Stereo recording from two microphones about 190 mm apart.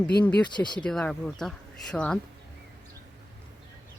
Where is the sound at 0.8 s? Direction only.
5° left (ahead or behind).